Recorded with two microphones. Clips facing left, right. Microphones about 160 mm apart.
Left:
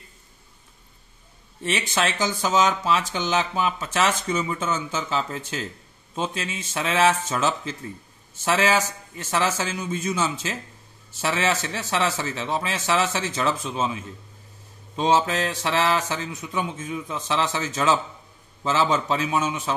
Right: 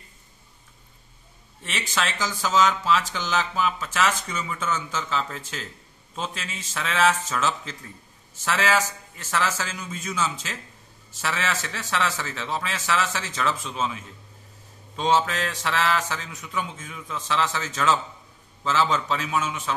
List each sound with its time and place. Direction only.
2.1 s speech: 20° left (ahead or behind)
15.0 s speech: 20° left (ahead or behind)